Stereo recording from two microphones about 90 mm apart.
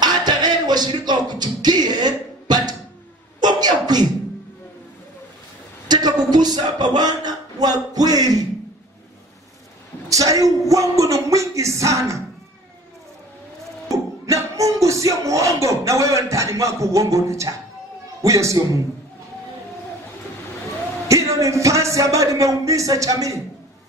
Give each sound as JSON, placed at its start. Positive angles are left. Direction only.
{"t": 0.0, "sound": "music", "side_deg": -55}
{"t": 3.3, "sound": "a sound", "side_deg": -50}
{"t": 5.9, "sound": "a sound", "side_deg": -50}
{"t": 10.0, "sound": "speech", "side_deg": -40}
{"t": 10.7, "sound": "music", "side_deg": -35}
{"t": 13.8, "sound": "music", "side_deg": -35}
{"t": 21.1, "sound": "speech", "side_deg": -35}